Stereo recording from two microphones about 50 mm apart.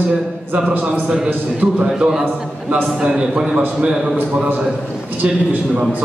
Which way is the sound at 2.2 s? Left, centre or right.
Right.